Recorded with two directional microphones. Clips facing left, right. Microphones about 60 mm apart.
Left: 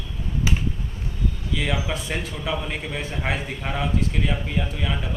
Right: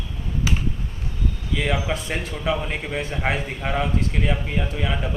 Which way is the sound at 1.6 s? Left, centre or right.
Centre.